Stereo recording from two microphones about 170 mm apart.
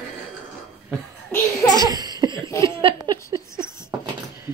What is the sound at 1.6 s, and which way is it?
Laughter, 25° left (ahead or behind).